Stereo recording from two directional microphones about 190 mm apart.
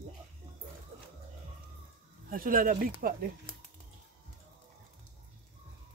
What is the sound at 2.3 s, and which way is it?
Speech, 50° right (ahead or behind).